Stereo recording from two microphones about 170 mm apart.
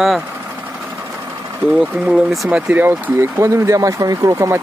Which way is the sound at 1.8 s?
5° right (ahead or behind).